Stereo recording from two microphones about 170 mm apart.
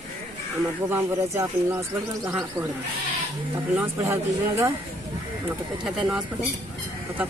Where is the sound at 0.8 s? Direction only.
15° right (ahead or behind).